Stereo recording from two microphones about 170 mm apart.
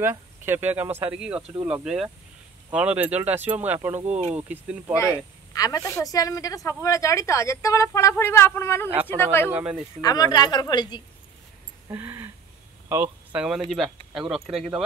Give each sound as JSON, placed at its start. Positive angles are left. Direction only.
{"t": 0.0, "sound": "speech", "side_deg": -15}
{"t": 4.1, "sound": "speech", "side_deg": -40}
{"t": 4.4, "sound": "speech", "side_deg": -10}
{"t": 4.9, "sound": "a woman's voice", "side_deg": 15}
{"t": 9.5, "sound": "speech", "side_deg": -5}
{"t": 10.0, "sound": "a woman's voice", "side_deg": 20}
{"t": 11.9, "sound": "a sound", "side_deg": -15}
{"t": 12.8, "sound": "speech", "side_deg": -10}